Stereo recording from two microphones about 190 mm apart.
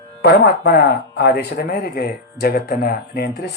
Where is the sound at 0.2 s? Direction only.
55° left (ahead or behind).